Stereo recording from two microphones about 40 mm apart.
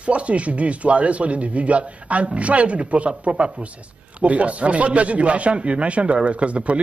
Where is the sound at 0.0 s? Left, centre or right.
Right.